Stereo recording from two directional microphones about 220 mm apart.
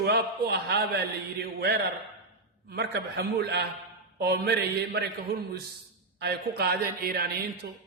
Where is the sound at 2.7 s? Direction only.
50° right (ahead or behind).